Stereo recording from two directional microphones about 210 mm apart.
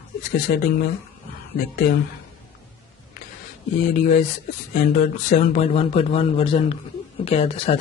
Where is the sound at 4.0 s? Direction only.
40° left (ahead or behind).